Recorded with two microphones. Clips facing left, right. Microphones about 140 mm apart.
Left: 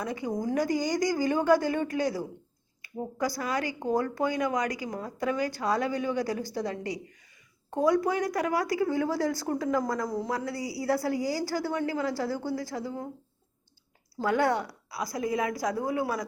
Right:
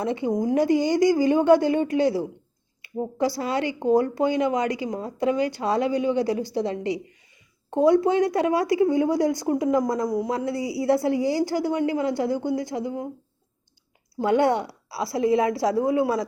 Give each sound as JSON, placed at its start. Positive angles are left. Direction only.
{"t": 0.0, "sound": "a woman's voice", "side_deg": -25}
{"t": 14.2, "sound": "a woman's voice", "side_deg": -25}